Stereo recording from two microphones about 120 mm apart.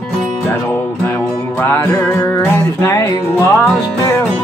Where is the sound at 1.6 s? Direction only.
20° left (ahead or behind).